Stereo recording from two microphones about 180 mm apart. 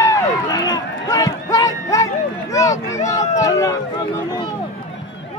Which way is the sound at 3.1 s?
20° left (ahead or behind).